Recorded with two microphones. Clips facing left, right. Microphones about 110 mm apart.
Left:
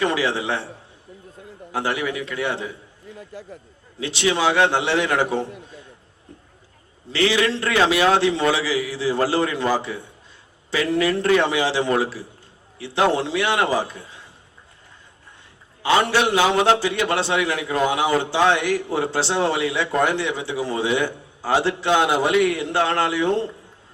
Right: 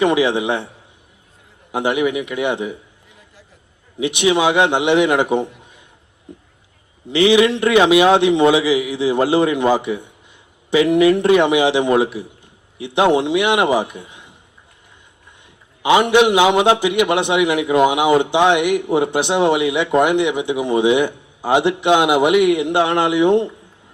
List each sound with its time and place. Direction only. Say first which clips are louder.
0.0 s a man's voice: right 6 dB; 20° right (ahead or behind)
1.7 s a man's voice: right 6 dB; 20° right (ahead or behind)
6.3 s a sound: right 6 dB; 15° right (ahead or behind)
7.1 s a man's voice: right 7 dB; 15° right (ahead or behind)
15.8 s a man's voice: right 6 dB; 15° right (ahead or behind)